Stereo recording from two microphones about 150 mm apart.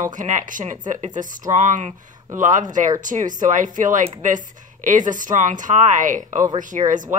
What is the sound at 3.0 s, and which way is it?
A woman's voice, 60° right (ahead or behind).